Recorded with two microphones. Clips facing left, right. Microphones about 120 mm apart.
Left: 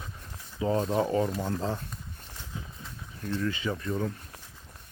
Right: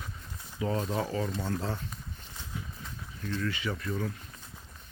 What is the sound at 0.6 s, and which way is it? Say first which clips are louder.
Speech: left 4 dB; 30° left (ahead or behind).